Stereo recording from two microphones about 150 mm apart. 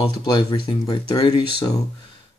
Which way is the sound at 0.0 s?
30° left (ahead or behind).